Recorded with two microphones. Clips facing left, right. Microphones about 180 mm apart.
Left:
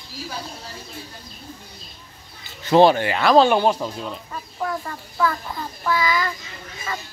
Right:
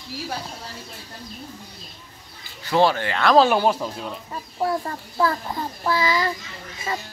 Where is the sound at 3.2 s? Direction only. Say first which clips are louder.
Left 1 dB; centre (ahead or behind).